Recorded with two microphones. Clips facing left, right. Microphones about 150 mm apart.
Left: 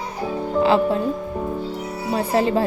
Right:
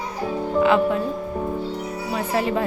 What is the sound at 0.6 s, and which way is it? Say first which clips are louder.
Speech: left 1 dB; 30° left (ahead or behind).